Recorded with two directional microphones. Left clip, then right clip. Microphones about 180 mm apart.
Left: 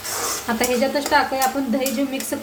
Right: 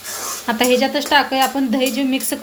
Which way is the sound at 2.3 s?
55° right (ahead or behind).